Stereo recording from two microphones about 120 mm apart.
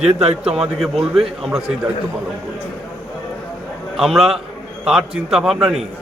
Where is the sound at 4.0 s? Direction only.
Centre (ahead or behind).